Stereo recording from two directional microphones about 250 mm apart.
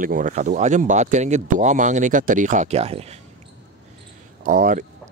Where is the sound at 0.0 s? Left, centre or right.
Right.